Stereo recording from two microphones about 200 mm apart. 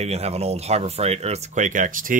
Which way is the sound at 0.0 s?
30° right (ahead or behind).